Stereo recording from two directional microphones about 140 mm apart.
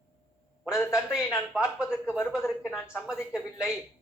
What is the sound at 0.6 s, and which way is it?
A man's voice, 5° right (ahead or behind).